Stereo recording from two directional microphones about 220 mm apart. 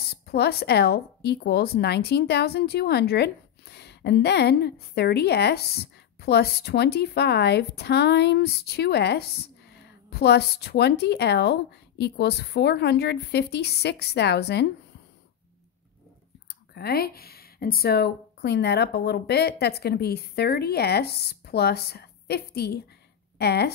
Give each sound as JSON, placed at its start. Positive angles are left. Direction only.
{"t": 0.1, "sound": "speech", "side_deg": 45}
{"t": 16.7, "sound": "speech", "side_deg": 45}